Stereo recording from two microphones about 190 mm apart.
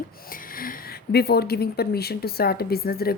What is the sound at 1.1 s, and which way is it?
Speech, 60° left (ahead or behind).